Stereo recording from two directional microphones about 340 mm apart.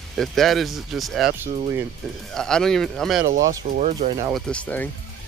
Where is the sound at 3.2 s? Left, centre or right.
Right.